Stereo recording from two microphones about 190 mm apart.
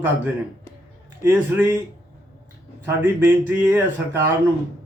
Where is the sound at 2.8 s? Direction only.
10° right (ahead or behind).